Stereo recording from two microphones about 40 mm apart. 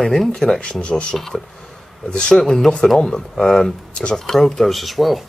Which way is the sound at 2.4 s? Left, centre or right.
Centre.